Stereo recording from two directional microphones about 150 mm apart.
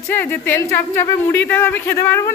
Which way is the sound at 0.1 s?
15° left (ahead or behind).